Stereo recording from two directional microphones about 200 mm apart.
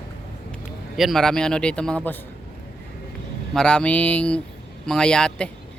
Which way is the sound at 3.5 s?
5° left (ahead or behind).